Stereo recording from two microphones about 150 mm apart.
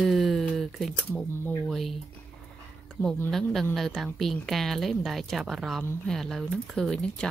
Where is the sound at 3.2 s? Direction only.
Centre (ahead or behind).